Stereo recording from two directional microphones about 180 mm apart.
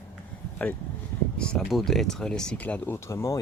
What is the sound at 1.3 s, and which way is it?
Speech, 5° left (ahead or behind).